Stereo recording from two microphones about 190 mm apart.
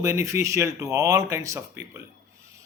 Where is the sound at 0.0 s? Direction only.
15° right (ahead or behind).